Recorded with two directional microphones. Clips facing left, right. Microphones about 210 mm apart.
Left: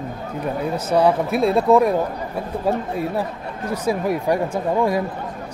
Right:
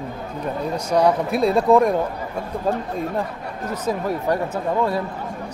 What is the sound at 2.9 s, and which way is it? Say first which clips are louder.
Speech: left 1 dB; 10° left (ahead or behind).